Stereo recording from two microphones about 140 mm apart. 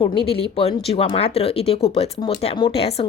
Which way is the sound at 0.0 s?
40° left (ahead or behind).